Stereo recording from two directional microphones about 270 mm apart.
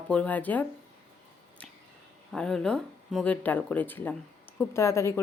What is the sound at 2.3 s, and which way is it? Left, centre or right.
Speech, centre.